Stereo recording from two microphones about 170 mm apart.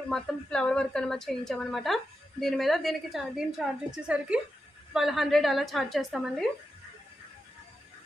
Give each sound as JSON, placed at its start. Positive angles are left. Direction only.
{"t": 0.1, "sound": "a woman's voice", "side_deg": 5}